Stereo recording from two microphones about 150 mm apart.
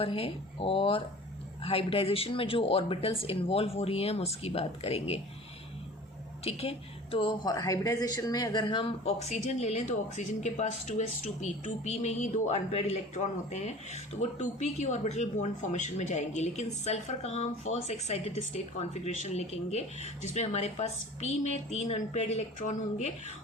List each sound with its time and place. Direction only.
0.0 s speech: 40° left (ahead or behind)
6.4 s a woman's voice: 40° left (ahead or behind)